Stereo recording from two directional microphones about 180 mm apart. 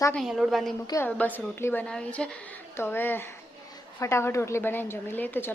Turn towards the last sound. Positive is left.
turn(degrees=10)  # may be behind; listen again after turning